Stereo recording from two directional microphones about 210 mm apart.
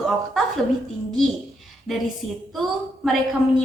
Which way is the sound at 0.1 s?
Centre (ahead or behind).